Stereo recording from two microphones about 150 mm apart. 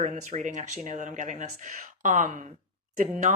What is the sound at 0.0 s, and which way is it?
Speech, 50° right (ahead or behind).